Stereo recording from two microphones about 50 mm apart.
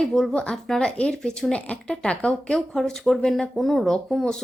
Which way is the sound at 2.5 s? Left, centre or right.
Centre.